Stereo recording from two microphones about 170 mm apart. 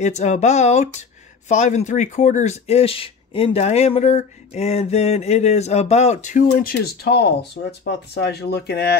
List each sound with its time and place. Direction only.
0.0 s speech: 45° left (ahead or behind); by 8.9 s 70° left (ahead or behind)